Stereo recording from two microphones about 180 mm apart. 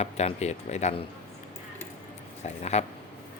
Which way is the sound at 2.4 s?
40° left (ahead or behind).